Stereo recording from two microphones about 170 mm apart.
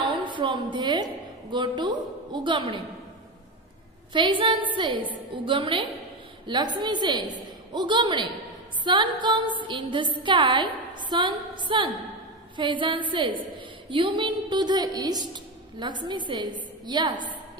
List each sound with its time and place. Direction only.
0.3 s a woman's voice: 30° right (ahead or behind)
4.1 s a woman's voice: 30° right (ahead or behind)